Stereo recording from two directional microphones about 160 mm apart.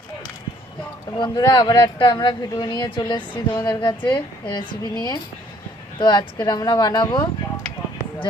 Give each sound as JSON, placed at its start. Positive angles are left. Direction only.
{"t": 1.2, "sound": "speech", "side_deg": 25}